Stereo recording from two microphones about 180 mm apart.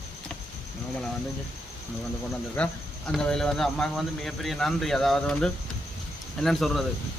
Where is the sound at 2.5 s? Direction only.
5° left (ahead or behind).